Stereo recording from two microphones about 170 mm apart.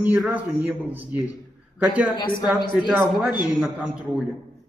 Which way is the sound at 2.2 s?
25° left (ahead or behind).